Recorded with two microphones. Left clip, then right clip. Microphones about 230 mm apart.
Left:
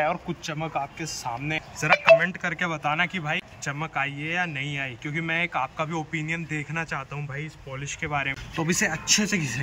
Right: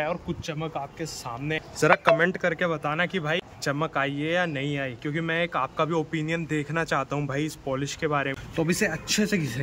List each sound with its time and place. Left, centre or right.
0.0 s speech: centre
1.8 s speech: right